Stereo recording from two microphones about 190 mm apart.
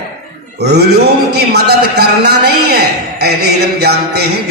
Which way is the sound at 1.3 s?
60° right (ahead or behind).